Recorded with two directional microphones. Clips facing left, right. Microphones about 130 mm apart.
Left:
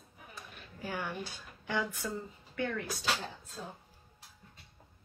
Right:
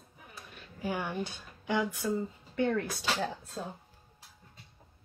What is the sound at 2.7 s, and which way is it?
Speech, 60° right (ahead or behind).